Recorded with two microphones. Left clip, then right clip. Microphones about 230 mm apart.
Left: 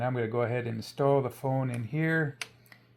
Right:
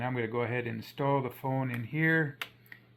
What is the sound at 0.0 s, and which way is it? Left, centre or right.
Speech, left.